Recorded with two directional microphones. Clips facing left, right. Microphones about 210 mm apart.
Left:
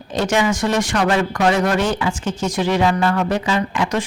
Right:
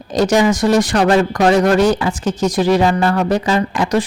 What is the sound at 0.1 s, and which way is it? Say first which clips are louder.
Speech: right 5 dB; 40° right (ahead or behind).